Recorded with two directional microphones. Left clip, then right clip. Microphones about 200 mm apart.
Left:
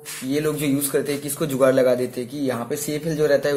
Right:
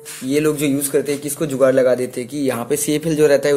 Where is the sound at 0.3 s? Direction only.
30° right (ahead or behind).